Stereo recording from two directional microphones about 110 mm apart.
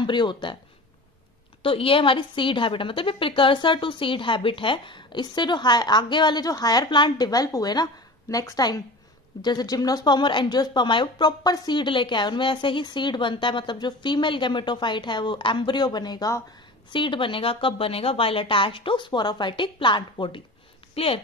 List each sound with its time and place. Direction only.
0.0 s speech: 45° left (ahead or behind)
1.6 s a woman's voice: 55° left (ahead or behind); by 16.4 s 35° left (ahead or behind)
16.9 s a woman's voice: 50° left (ahead or behind)
20.9 s speech: 60° left (ahead or behind)